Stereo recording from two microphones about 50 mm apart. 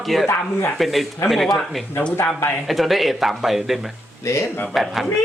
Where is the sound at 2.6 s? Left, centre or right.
Centre.